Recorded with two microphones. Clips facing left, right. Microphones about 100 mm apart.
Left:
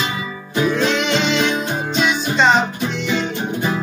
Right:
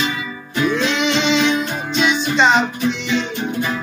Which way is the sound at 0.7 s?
Centre (ahead or behind).